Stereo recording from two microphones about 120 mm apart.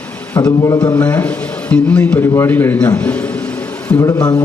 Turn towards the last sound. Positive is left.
turn(degrees=30)  # may be behind; listen again after turning